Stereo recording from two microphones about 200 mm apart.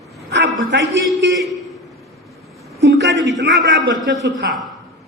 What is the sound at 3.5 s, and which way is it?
Speech, centre (ahead or behind).